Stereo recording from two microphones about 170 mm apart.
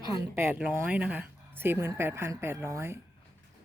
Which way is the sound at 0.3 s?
15° right (ahead or behind).